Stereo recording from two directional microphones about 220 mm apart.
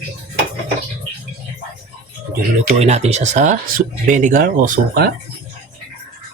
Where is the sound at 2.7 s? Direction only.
30° right (ahead or behind).